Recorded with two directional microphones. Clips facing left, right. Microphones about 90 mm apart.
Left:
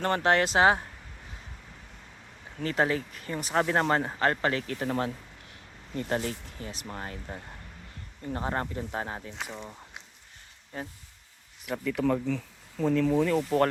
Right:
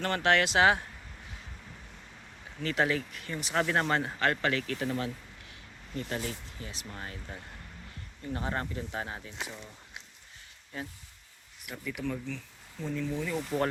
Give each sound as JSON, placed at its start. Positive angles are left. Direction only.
{"t": 0.0, "sound": "speech", "side_deg": 35}
{"t": 2.6, "sound": "speech", "side_deg": 35}
{"t": 10.7, "sound": "speech", "side_deg": 40}
{"t": 11.7, "sound": "speech", "side_deg": 90}